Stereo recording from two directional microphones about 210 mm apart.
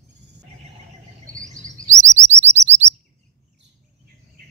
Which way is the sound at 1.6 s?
35° right (ahead or behind).